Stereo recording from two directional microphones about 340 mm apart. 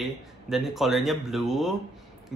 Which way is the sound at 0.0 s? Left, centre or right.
Centre.